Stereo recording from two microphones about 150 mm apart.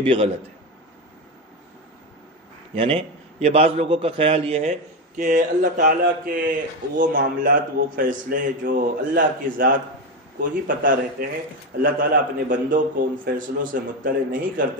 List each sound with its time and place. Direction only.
0.0 s a man's voice: 35° right (ahead or behind)
2.7 s a man's voice: 40° right (ahead or behind)
4.6 s a man's voice: 60° right (ahead or behind)